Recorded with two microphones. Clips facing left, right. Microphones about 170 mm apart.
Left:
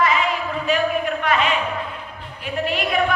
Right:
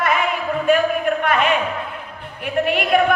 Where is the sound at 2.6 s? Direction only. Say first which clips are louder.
Right 4 dB; 55° right (ahead or behind).